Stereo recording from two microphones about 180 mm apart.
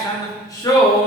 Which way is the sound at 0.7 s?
20° left (ahead or behind).